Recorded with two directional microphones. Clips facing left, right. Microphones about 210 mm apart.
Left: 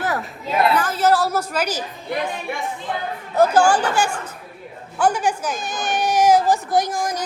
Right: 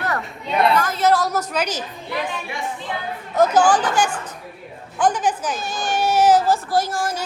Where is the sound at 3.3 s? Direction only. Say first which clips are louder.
Even; 10° left (ahead or behind).